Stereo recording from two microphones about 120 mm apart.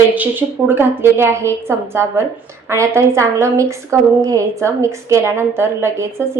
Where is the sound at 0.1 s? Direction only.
15° right (ahead or behind).